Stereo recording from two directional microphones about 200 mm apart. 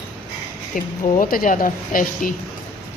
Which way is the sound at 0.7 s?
45° left (ahead or behind).